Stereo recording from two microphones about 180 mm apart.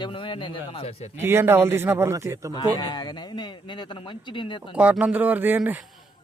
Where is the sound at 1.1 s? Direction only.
15° right (ahead or behind).